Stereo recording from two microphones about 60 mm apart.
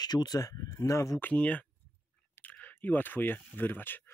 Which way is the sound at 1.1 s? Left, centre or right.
Left.